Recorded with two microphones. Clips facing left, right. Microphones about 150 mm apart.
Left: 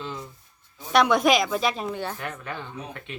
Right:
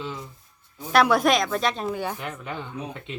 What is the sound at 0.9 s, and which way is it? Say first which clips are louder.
Speech: even; centre (ahead or behind).